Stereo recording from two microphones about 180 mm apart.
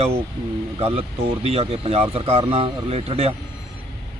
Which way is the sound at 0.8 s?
35° right (ahead or behind).